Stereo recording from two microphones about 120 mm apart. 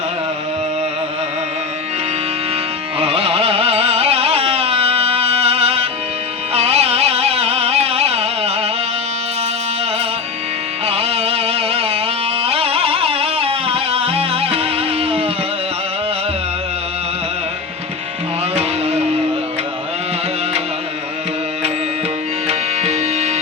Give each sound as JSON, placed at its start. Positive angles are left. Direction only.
{"t": 3.0, "sound": "carnatic music", "side_deg": -55}
{"t": 6.5, "sound": "music", "side_deg": -60}
{"t": 10.8, "sound": "music", "side_deg": -55}
{"t": 18.5, "sound": "music", "side_deg": -60}
{"t": 22.4, "sound": "tabla", "side_deg": -60}